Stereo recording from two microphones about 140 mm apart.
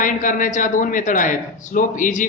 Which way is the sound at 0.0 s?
70° left (ahead or behind).